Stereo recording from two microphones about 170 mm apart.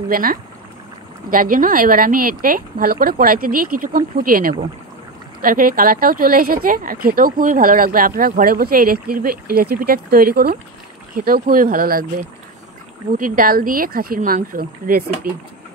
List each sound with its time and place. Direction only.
0.1 s speech: 55° right (ahead or behind)